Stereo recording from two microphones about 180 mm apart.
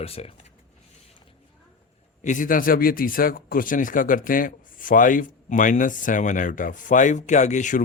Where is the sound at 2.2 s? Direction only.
45° left (ahead or behind).